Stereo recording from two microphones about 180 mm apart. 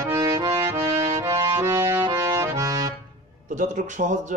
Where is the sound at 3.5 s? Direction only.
45° right (ahead or behind).